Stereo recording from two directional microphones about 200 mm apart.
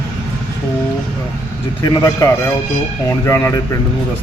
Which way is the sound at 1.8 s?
15° left (ahead or behind).